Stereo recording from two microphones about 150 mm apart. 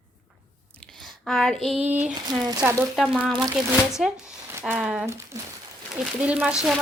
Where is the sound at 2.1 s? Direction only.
25° right (ahead or behind).